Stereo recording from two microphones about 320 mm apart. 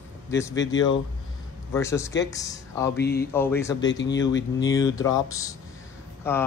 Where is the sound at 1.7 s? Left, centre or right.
Centre.